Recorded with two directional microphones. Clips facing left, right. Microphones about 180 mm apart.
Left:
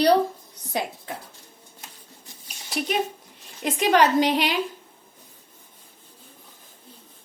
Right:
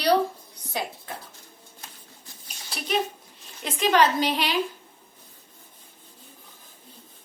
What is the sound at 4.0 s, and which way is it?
Speech, 15° left (ahead or behind).